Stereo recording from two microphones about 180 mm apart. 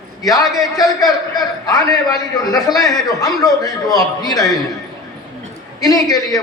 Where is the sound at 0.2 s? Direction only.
20° left (ahead or behind).